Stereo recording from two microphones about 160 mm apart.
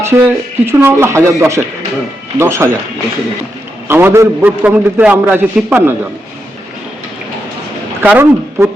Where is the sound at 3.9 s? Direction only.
15° right (ahead or behind).